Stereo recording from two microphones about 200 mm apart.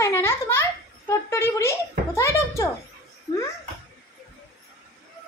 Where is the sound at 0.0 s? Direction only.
10° left (ahead or behind).